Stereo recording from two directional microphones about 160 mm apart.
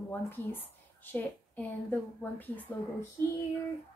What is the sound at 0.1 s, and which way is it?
A woman's voice, 15° left (ahead or behind).